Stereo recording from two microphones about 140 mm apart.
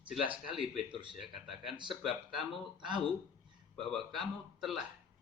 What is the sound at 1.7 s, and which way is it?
Speech, 35° right (ahead or behind).